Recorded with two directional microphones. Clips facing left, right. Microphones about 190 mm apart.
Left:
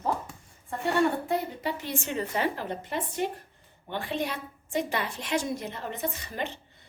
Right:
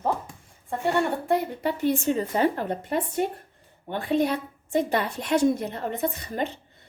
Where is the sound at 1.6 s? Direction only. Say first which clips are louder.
Right 9 dB; 55° right (ahead or behind).